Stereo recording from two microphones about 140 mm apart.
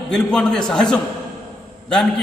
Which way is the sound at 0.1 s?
5° left (ahead or behind).